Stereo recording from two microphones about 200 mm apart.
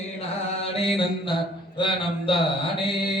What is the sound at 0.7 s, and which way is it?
Mantra, 30° left (ahead or behind).